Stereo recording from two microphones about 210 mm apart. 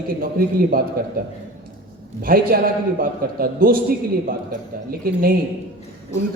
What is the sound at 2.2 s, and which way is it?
A man's voice, 45° right (ahead or behind).